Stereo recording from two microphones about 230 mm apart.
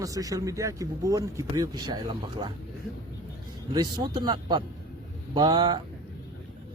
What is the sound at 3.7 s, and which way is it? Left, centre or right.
A man's voice, centre.